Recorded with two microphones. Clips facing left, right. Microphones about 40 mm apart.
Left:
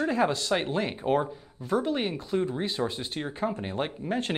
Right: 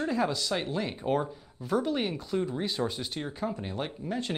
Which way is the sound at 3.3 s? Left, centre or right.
Left.